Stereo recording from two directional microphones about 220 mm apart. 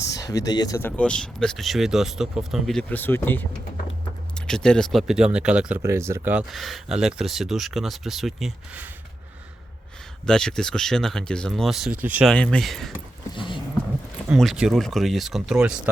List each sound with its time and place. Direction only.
0.1 s speech: 15° left (ahead or behind); by 8.9 s 5° right (ahead or behind)
10.2 s speech: 5° left (ahead or behind)
12.3 s speech: 5° left (ahead or behind)
13.3 s dog: 20° left (ahead or behind)
14.3 s speech: centre (ahead or behind)